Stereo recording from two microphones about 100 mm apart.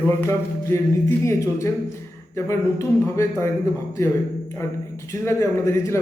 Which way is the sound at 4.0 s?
30° left (ahead or behind).